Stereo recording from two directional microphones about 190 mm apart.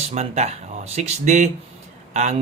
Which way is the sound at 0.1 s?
35° right (ahead or behind).